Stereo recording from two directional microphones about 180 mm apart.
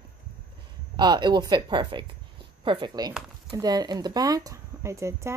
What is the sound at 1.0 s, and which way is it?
Speech, 25° right (ahead or behind).